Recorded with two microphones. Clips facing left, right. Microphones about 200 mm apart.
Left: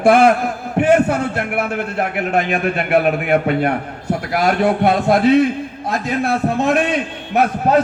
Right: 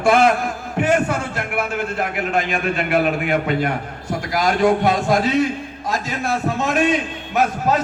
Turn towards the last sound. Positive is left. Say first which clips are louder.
# left 4 dB
turn(degrees=60)  # may be behind; listen again after turning